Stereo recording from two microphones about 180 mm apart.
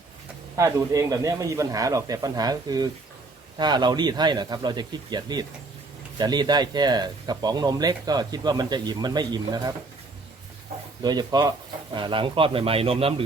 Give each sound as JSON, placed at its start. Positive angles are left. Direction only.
{"t": 0.5, "sound": "speech", "side_deg": -15}
{"t": 11.0, "sound": "speech", "side_deg": -25}